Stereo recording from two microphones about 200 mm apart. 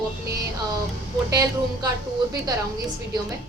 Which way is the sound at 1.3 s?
15° right (ahead or behind).